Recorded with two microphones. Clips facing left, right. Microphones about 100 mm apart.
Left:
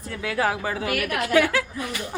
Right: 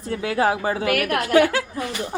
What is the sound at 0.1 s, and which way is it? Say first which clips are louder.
Speech: right 4 dB; 30° right (ahead or behind).